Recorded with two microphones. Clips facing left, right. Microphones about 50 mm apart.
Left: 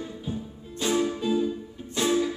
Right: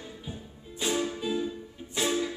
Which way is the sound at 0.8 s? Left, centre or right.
Centre.